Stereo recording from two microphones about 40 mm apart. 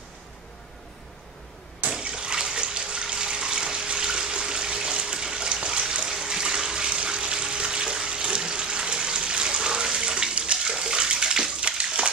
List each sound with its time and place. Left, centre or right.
1.9 s water: centre